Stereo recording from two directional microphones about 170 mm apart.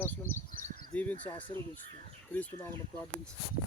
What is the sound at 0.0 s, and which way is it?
Crow, 15° left (ahead or behind).